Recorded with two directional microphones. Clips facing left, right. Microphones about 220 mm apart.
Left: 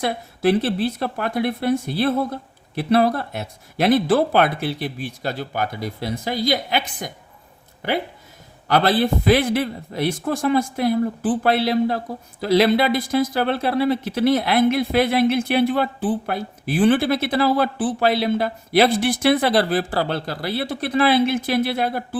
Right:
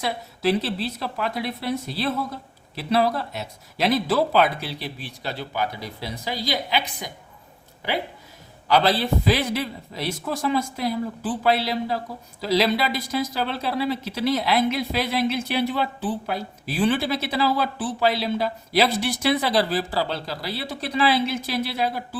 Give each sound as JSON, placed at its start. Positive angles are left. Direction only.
{"t": 0.0, "sound": "speech", "side_deg": 50}
{"t": 8.6, "sound": "speech", "side_deg": 50}